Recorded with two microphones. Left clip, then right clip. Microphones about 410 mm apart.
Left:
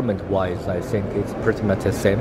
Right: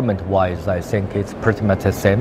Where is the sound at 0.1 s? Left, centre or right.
Right.